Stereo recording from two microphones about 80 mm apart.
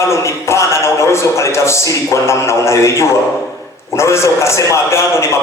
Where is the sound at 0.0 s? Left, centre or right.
Left.